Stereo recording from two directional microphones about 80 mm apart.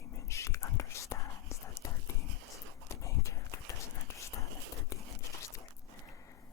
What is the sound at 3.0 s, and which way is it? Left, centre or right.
Clip-clop, left.